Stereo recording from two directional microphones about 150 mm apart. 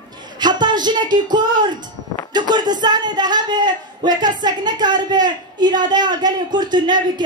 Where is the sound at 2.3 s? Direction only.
30° right (ahead or behind).